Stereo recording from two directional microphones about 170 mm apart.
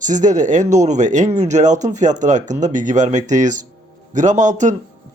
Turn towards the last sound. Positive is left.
turn(degrees=-45)  # may be behind; listen again after turning